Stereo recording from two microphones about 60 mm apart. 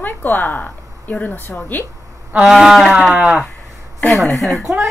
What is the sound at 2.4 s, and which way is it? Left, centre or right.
Speech, centre.